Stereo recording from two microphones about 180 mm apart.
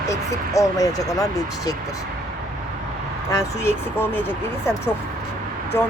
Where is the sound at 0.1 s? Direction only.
15° left (ahead or behind).